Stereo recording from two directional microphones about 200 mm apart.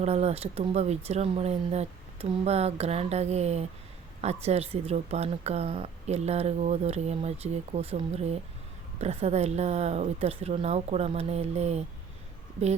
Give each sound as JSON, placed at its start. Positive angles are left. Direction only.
{"t": 0.0, "sound": "a woman's voice", "side_deg": -30}